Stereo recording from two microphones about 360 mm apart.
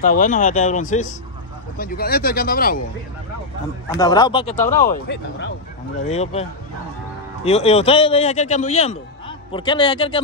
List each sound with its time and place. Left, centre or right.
0.0 s speech: left
3.9 s speech: centre
7.4 s speech: centre